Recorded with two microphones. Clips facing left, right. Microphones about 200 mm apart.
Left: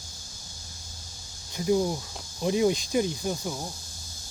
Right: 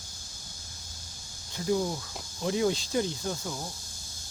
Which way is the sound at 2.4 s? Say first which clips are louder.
Left 4 dB; 20° left (ahead or behind).